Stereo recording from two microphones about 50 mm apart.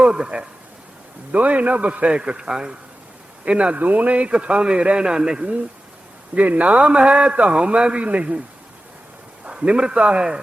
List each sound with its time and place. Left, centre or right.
0.0 s a man's voice: centre
3.8 s a man's voice: right
6.3 s a man's voice: right
9.5 s a man's voice: centre